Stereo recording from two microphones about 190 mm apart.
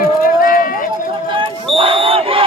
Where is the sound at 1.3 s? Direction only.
30° right (ahead or behind).